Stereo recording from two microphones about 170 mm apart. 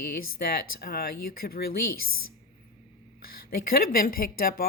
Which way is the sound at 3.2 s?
60° left (ahead or behind).